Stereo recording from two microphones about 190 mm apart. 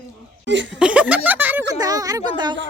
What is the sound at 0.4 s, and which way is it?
Speech, 70° right (ahead or behind).